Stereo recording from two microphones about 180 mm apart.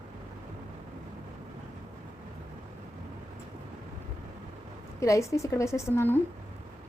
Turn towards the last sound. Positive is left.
turn(degrees=10)  # may be behind; listen again after turning